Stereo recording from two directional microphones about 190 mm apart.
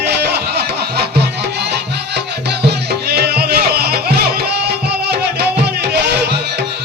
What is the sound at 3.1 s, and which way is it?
Music, 55° right (ahead or behind).